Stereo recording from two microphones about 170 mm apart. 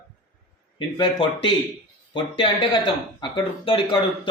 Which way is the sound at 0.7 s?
30° left (ahead or behind).